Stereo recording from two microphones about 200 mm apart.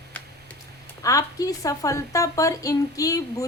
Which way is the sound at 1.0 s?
15° left (ahead or behind).